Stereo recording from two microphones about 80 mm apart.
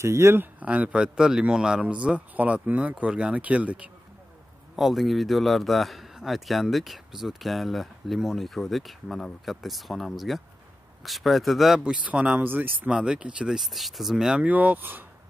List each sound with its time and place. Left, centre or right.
0.0 s speech: right
0.6 s a man's voice: centre
4.7 s a man's voice: centre
11.8 s a man's voice: centre
12.9 s a man's voice: centre